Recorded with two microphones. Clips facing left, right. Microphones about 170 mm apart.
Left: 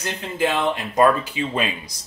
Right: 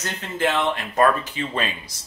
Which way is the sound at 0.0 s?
10° left (ahead or behind).